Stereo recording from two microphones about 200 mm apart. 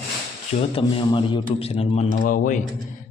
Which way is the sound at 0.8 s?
25° left (ahead or behind).